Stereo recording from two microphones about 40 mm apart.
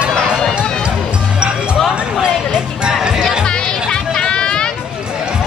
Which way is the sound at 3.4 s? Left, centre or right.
Left.